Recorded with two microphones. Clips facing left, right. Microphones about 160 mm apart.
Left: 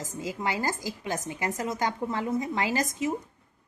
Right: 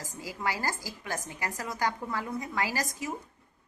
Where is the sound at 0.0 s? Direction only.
20° left (ahead or behind).